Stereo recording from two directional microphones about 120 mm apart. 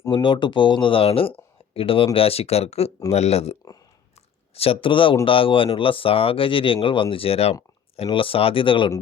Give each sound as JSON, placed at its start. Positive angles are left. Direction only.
{"t": 0.1, "sound": "speech", "side_deg": 40}